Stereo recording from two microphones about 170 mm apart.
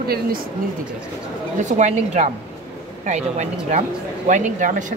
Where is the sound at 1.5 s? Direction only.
45° right (ahead or behind).